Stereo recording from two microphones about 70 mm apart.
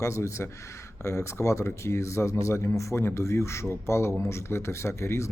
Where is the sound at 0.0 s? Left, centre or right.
Left.